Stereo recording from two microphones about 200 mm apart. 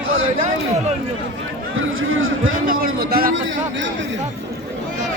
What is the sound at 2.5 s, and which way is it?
Speech, 45° right (ahead or behind).